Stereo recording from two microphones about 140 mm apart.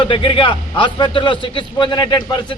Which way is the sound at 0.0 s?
35° left (ahead or behind).